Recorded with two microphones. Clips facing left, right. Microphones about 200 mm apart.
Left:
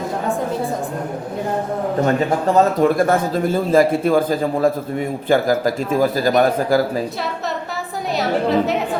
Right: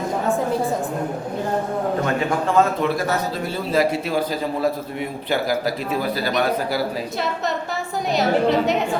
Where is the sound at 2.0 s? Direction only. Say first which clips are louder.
Left 4 dB; 40° left (ahead or behind).